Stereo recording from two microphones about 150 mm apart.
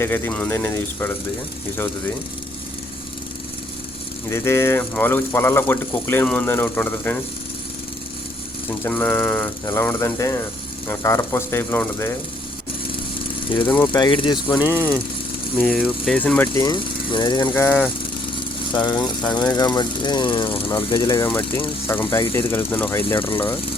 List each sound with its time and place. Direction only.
0.0 s speech: 10° left (ahead or behind)
4.3 s speech: 15° left (ahead or behind)
8.9 s speech: 10° left (ahead or behind)
13.7 s speech: 10° left (ahead or behind)
13.9 s speech: 30° left (ahead or behind)
14.6 s speech: 15° right (ahead or behind)
15.5 s speech: centre (ahead or behind)
16.6 s speech: 30° left (ahead or behind)
17.5 s speech: 10° left (ahead or behind)
18.7 s speech: 30° left (ahead or behind)
21.2 s speech: 15° left (ahead or behind)